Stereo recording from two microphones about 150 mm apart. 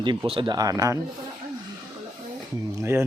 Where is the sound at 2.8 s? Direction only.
15° right (ahead or behind).